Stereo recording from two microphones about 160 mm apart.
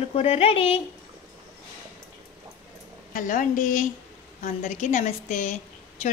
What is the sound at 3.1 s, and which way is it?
A woman's voice, 55° left (ahead or behind).